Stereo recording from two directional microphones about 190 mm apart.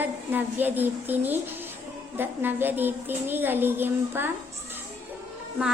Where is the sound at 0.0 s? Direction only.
10° right (ahead or behind).